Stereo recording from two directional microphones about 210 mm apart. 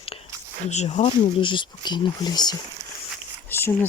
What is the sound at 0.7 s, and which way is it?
Speech, 30° left (ahead or behind).